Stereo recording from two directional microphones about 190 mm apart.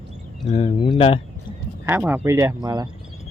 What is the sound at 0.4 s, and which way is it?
Speech, 30° left (ahead or behind).